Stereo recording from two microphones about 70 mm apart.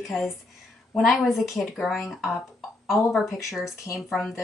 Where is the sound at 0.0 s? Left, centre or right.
Centre.